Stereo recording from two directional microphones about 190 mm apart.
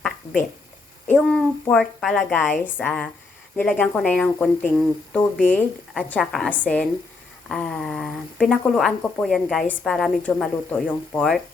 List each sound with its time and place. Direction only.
1.0 s speech: 5° left (ahead or behind)